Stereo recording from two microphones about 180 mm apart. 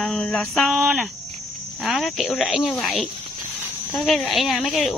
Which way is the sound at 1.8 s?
Centre (ahead or behind).